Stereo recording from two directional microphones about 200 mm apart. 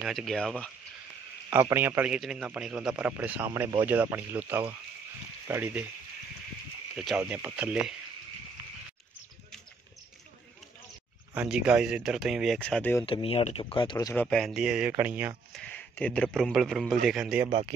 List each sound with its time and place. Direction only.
0.0 s speech: centre (ahead or behind)
1.5 s a man's voice: 10° right (ahead or behind)
7.0 s a man's voice: 5° right (ahead or behind)
11.3 s speech: 5° right (ahead or behind)
13.0 s speech: 25° left (ahead or behind)
14.1 s speech: centre (ahead or behind)
15.5 s a man's voice: 5° left (ahead or behind)
17.5 s speech: 30° right (ahead or behind)